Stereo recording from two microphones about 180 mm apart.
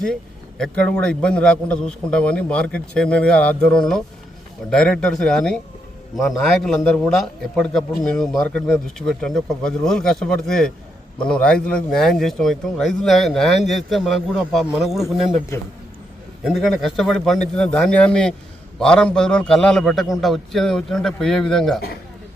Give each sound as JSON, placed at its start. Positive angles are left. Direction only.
{"t": 0.6, "sound": "a man's voice", "side_deg": 5}
{"t": 15.5, "sound": "a man's voice", "side_deg": 15}
{"t": 16.4, "sound": "a man's voice", "side_deg": 0}